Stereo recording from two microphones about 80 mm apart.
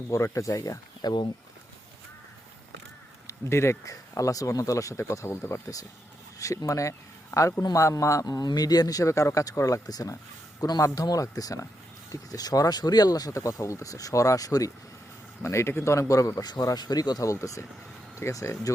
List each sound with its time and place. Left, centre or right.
0.1 s speech: left
3.5 s a man's voice: left
15.4 s speech: left
16.4 s speech: left